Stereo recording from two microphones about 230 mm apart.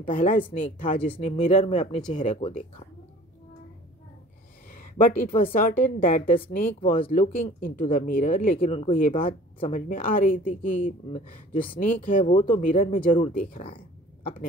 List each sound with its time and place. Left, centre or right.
0.0 s a woman's voice: left
4.6 s a sound: left
5.5 s a woman's voice: left
11.5 s speech: left
11.8 s a woman's voice: left
12.4 s speech: left
12.6 s a woman's voice: left